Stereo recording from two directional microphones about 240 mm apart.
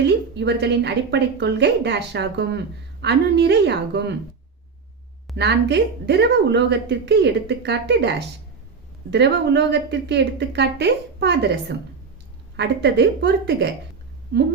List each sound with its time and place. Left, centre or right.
0.0 s a woman's voice: right
5.4 s a woman's voice: right